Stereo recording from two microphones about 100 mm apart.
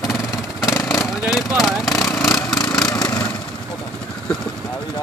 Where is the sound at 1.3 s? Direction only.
5° right (ahead or behind).